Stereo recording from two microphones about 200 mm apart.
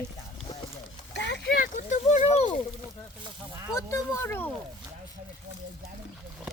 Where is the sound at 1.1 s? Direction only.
60° left (ahead or behind).